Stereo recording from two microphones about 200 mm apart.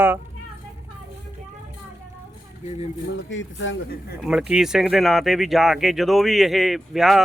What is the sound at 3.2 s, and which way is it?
Speech, 70° left (ahead or behind).